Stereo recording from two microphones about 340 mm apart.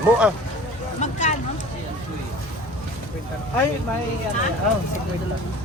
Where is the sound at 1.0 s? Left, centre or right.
Left.